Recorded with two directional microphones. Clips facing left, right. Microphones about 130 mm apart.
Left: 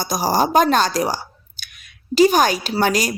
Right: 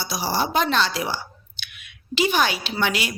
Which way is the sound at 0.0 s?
45° left (ahead or behind).